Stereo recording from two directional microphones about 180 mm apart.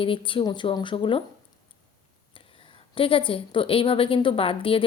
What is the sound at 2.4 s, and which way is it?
A woman's voice, 30° left (ahead or behind).